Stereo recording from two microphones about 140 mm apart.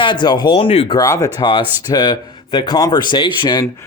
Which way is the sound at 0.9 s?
25° left (ahead or behind).